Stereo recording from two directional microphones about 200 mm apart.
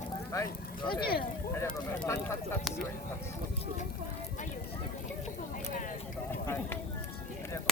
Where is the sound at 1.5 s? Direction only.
10° left (ahead or behind).